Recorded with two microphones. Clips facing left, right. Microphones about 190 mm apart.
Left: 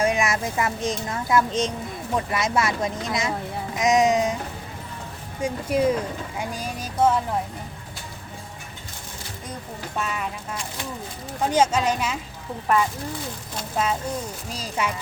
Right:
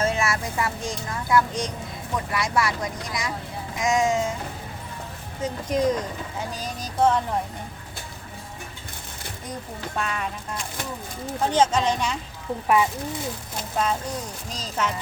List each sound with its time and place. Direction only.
0.0 s speech: 15° left (ahead or behind)
5.4 s a woman's voice: 10° left (ahead or behind)
10.0 s speech: 5° left (ahead or behind)
11.4 s a woman's voice: 10° left (ahead or behind)
12.6 s speech: 10° right (ahead or behind)
14.5 s a woman's voice: 10° left (ahead or behind)